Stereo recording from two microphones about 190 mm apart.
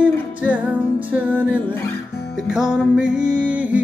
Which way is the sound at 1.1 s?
10° right (ahead or behind).